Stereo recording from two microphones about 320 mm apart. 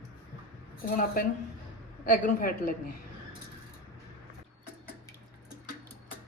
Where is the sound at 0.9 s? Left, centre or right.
Left.